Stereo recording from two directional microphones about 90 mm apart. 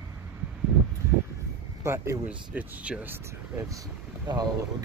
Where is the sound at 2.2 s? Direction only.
15° right (ahead or behind).